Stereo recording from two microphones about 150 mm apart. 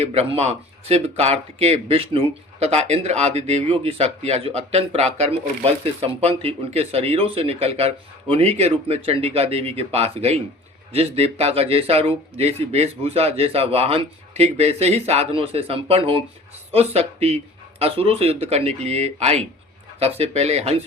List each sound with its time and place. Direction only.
0.0 s speech: 40° right (ahead or behind)